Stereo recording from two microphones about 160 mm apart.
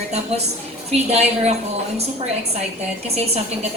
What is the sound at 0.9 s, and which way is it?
Speech, 40° right (ahead or behind).